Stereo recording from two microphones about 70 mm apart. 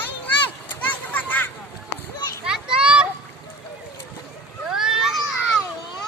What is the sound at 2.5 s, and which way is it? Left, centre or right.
Children playing, centre.